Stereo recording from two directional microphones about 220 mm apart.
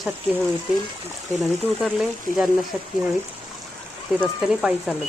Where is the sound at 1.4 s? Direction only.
Centre (ahead or behind).